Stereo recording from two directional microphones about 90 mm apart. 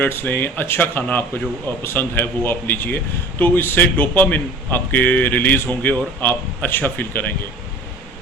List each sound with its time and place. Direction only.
0.0 s a man's voice: 20° left (ahead or behind)